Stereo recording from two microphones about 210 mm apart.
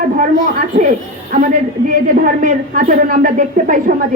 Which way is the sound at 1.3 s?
40° right (ahead or behind).